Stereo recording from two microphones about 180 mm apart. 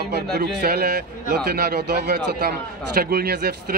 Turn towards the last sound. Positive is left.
turn(degrees=-60)  # may be behind; listen again after turning